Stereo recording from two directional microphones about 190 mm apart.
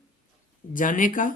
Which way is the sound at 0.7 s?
45° left (ahead or behind).